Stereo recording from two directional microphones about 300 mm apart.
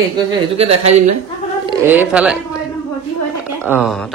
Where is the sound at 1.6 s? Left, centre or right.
Centre.